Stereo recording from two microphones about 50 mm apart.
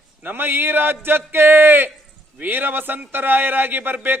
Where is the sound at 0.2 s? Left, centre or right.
Right.